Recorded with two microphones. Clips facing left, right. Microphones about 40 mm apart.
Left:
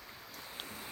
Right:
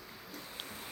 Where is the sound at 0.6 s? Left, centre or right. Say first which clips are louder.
Even; right.